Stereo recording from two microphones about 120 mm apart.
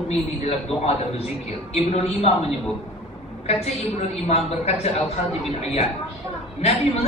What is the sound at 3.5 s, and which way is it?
A man's voice, 60° left (ahead or behind).